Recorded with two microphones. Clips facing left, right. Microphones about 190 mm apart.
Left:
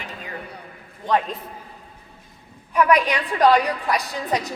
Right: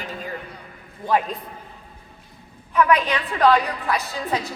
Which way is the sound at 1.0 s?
5° right (ahead or behind).